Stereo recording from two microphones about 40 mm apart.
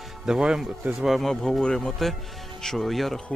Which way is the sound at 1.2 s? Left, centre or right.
Centre.